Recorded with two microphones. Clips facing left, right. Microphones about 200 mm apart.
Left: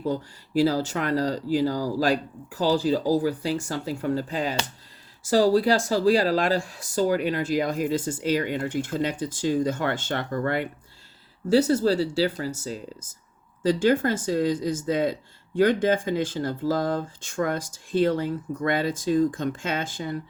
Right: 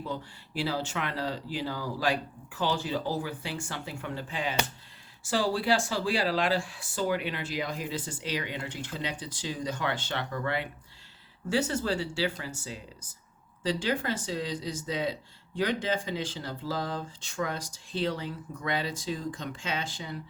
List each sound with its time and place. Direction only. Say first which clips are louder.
0.0 s speech: left 9 dB; 40° left (ahead or behind)